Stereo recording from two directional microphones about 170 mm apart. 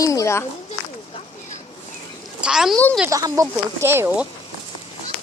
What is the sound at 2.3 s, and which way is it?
Speech, 5° right (ahead or behind).